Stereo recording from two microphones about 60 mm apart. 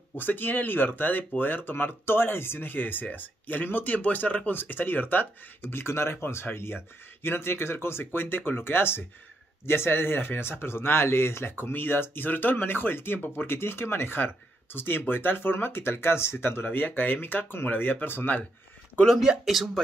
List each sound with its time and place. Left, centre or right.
0.1 s speech: left
19.2 s speech: centre